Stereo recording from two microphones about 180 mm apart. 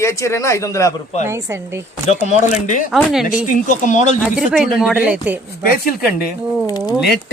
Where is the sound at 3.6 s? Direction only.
45° left (ahead or behind).